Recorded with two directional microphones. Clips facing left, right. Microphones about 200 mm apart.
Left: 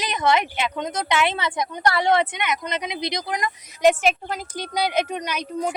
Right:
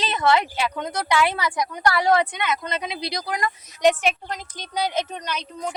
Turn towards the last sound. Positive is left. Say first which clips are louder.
# left 4 dB
turn(degrees=10)  # may be behind; listen again after turning